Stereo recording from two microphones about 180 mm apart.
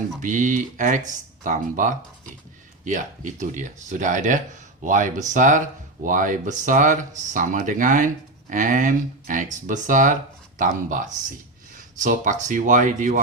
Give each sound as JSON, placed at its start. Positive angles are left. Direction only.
{"t": 0.2, "sound": "speech", "side_deg": -45}